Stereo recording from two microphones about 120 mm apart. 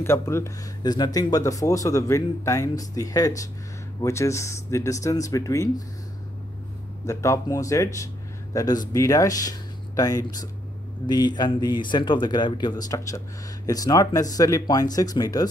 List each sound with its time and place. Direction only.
0.0 s speech: 20° left (ahead or behind)
0.9 s speech: 35° left (ahead or behind)
7.1 s a man's voice: 25° left (ahead or behind)